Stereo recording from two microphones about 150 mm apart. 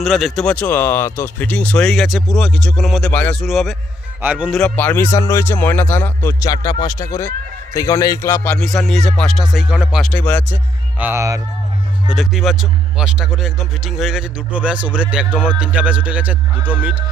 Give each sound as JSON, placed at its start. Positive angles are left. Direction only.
{"t": 0.0, "sound": "speech", "side_deg": 0}
{"t": 3.4, "sound": "a man's voice", "side_deg": 0}
{"t": 4.5, "sound": "speech", "side_deg": 5}
{"t": 8.5, "sound": "speech", "side_deg": 0}
{"t": 10.1, "sound": "speech", "side_deg": 10}
{"t": 11.0, "sound": "speech", "side_deg": -15}
{"t": 12.1, "sound": "speech", "side_deg": -5}